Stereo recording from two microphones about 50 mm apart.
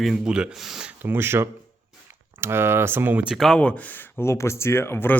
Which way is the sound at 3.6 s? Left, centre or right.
Left.